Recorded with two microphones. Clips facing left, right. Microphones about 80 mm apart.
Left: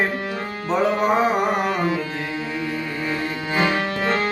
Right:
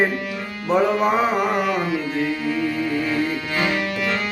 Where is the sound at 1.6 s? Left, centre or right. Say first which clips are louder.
Even; left.